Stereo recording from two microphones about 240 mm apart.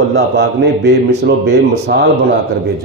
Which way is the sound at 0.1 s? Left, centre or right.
Right.